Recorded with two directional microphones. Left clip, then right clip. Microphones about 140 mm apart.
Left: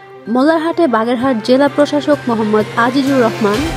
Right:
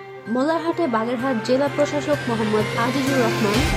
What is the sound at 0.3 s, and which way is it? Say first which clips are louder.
Speech: left 8 dB; 50° left (ahead or behind).